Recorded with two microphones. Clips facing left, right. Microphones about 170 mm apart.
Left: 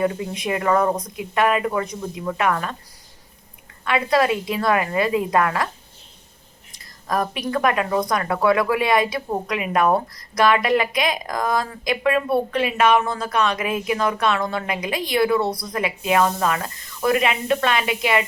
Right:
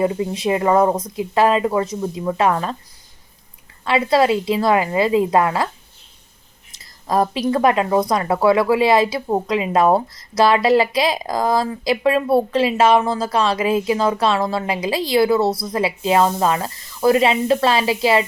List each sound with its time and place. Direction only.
0.0 s speech: 25° right (ahead or behind)
3.8 s speech: 25° right (ahead or behind)
7.1 s speech: 30° right (ahead or behind)